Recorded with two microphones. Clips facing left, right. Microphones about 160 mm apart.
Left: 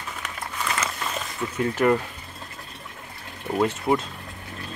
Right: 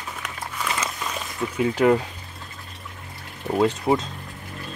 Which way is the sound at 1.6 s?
15° right (ahead or behind).